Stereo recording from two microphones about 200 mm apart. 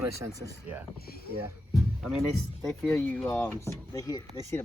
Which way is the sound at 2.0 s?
Centre (ahead or behind).